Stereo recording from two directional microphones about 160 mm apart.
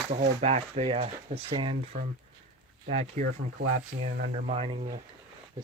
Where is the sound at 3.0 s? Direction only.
50° right (ahead or behind).